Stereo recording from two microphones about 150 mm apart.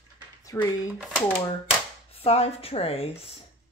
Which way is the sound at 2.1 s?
45° left (ahead or behind).